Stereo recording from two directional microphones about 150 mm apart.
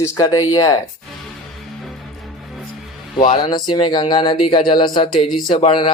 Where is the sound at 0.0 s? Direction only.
20° left (ahead or behind).